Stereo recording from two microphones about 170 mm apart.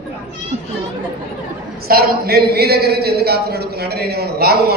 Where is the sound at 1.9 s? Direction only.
60° right (ahead or behind).